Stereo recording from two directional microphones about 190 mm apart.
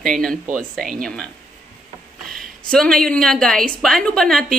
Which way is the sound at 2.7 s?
5° left (ahead or behind).